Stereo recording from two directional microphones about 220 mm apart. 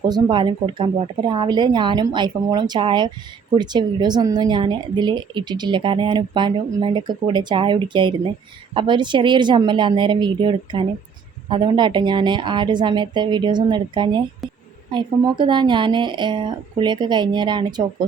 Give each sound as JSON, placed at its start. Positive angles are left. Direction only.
{"t": 0.1, "sound": "a woman's voice", "side_deg": -20}
{"t": 14.4, "sound": "a sound", "side_deg": 0}
{"t": 14.8, "sound": "a woman's voice", "side_deg": -20}